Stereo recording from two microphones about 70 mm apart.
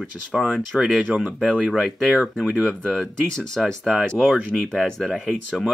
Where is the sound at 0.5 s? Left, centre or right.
Centre.